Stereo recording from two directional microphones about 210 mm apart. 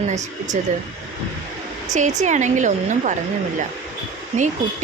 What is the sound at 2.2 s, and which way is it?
Speech, 35° right (ahead or behind).